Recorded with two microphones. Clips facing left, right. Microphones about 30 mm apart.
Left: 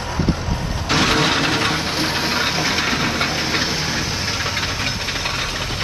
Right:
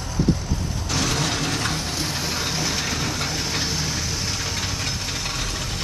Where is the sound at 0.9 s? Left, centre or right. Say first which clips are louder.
Left 8 dB; left.